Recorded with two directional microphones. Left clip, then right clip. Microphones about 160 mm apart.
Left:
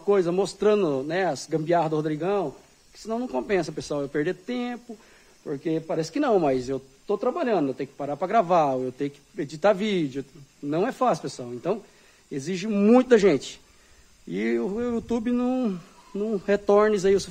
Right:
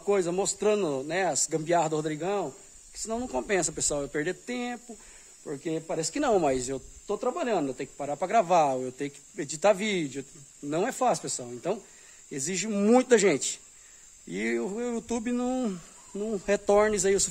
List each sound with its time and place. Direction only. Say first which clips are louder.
0.0 s speech: left 4 dB; 15° right (ahead or behind)